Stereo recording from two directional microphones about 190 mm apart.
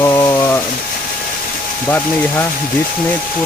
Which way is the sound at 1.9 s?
10° left (ahead or behind).